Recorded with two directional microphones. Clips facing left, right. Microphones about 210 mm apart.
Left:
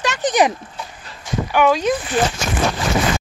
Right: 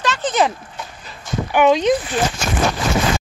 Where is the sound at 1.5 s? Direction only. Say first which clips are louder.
Right 2 dB; 20° right (ahead or behind).